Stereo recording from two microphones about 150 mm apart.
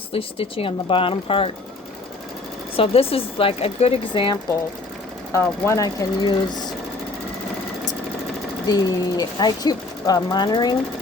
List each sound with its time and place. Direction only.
0.1 s speech: 40° left (ahead or behind)
2.7 s speech: 40° left (ahead or behind)
5.3 s speech: 20° left (ahead or behind)
8.6 s speech: 25° left (ahead or behind)